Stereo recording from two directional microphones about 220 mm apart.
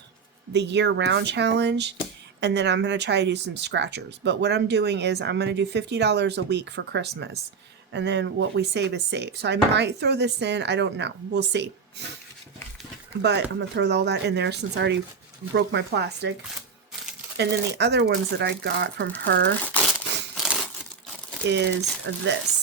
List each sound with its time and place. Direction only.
0.5 s speech: 50° right (ahead or behind)
13.2 s speech: 50° right (ahead or behind)
17.3 s speech: 50° right (ahead or behind)
21.4 s speech: 50° right (ahead or behind)